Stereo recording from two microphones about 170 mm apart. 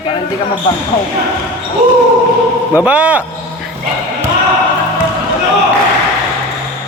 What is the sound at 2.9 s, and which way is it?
Speech, 10° right (ahead or behind).